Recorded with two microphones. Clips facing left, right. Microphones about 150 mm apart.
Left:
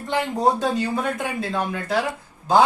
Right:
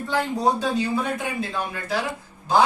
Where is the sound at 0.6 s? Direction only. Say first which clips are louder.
Left 1 dB; 70° left (ahead or behind).